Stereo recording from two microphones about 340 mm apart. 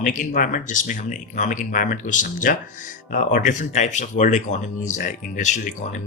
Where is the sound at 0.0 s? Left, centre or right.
Left.